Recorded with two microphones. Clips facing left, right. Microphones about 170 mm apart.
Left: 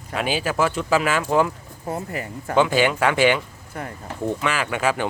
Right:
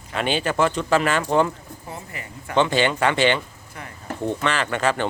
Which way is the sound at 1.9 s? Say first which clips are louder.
Left 9 dB; 45° left (ahead or behind).